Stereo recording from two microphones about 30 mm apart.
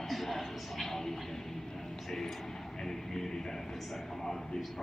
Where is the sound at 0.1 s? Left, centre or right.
Centre.